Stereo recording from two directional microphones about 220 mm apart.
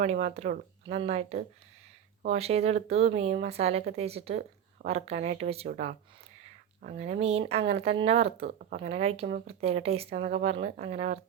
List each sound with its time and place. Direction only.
0.0 s speech: 30° right (ahead or behind)
6.9 s speech: 30° right (ahead or behind)
10.2 s speech: 45° right (ahead or behind)
10.4 s speech: 30° right (ahead or behind)